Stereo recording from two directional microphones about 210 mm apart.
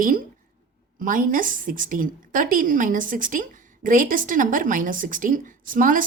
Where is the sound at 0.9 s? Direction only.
40° right (ahead or behind).